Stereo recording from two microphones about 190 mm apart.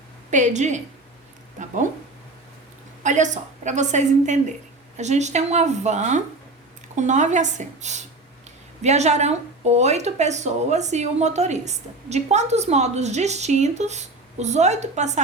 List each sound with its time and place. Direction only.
0.3 s a woman's voice: 40° right (ahead or behind)
3.0 s a woman's voice: 40° right (ahead or behind)